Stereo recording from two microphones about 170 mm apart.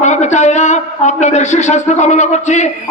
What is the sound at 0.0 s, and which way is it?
A man's voice, 45° left (ahead or behind).